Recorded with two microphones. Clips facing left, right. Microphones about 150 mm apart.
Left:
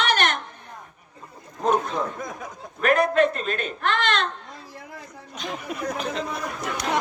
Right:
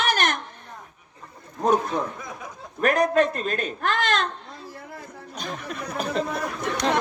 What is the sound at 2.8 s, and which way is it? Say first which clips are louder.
A woman's voice: left 1 dB; 40° right (ahead or behind).